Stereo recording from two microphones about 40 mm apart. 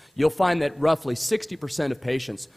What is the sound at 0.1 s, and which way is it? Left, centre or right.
A man's voice, centre.